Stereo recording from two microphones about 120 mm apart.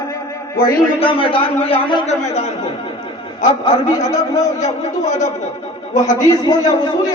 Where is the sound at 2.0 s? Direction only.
70° left (ahead or behind).